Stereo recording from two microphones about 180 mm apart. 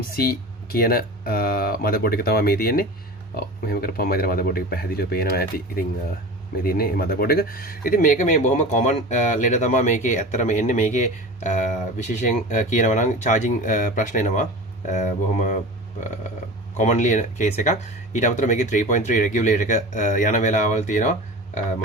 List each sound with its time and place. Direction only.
0.7 s speech: 55° left (ahead or behind)
16.7 s speech: 40° left (ahead or behind)